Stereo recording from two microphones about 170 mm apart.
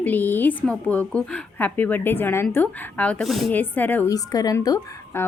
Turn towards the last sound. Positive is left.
turn(degrees=20)  # may be behind; listen again after turning